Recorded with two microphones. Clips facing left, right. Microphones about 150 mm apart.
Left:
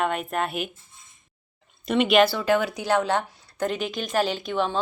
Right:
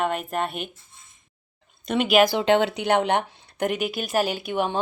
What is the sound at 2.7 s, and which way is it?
Speech, 65° right (ahead or behind).